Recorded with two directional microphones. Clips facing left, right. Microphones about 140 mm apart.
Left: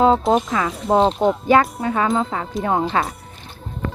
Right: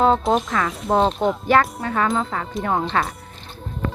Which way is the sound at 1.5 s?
20° left (ahead or behind).